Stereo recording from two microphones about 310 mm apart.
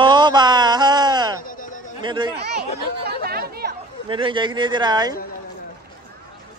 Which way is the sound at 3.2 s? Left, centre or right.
Right.